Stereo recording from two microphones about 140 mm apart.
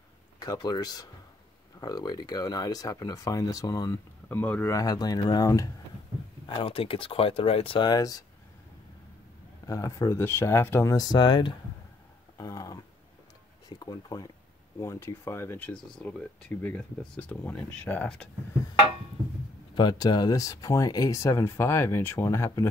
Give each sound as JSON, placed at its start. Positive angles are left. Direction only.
{"t": 0.4, "sound": "speech", "side_deg": 30}
{"t": 4.3, "sound": "speech", "side_deg": 15}
{"t": 6.4, "sound": "speech", "side_deg": 35}
{"t": 9.7, "sound": "speech", "side_deg": 20}
{"t": 12.4, "sound": "a sound", "side_deg": 25}
{"t": 13.7, "sound": "speech", "side_deg": 25}
{"t": 19.7, "sound": "speech", "side_deg": 30}